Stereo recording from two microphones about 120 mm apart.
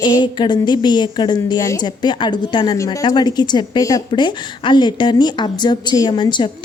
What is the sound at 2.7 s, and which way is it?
Speech, 25° left (ahead or behind).